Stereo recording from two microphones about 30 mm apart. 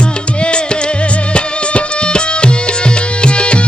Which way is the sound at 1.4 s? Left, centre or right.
Left.